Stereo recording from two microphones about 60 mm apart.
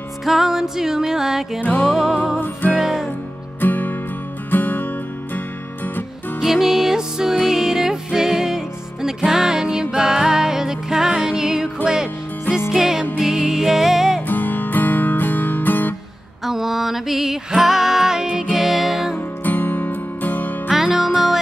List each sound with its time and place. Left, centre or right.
0.2 s music: centre
3.6 s music: left
6.4 s music: centre
14.2 s music: left
16.4 s music: centre
19.1 s music: left
20.6 s music: centre